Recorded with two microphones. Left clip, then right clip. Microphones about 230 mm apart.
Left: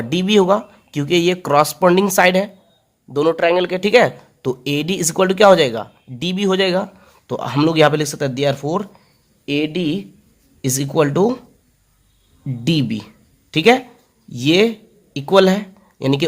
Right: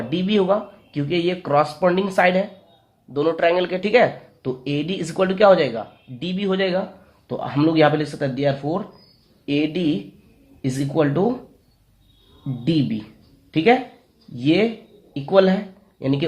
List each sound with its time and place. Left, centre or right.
0.1 s speech: left
12.6 s speech: left